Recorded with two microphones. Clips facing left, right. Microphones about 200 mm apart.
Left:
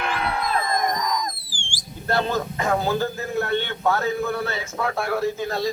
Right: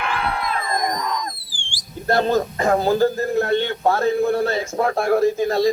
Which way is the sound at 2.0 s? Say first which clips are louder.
Right 5 dB; 40° right (ahead or behind).